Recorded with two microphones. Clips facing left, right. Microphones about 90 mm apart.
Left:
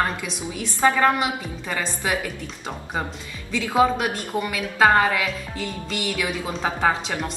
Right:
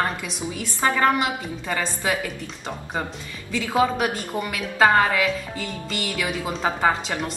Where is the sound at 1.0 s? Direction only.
Centre (ahead or behind).